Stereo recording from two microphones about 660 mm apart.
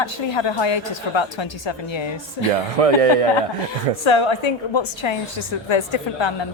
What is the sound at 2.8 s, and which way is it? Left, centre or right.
Speech, right.